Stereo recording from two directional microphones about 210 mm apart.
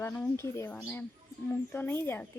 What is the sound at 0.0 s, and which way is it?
Speech, 10° left (ahead or behind).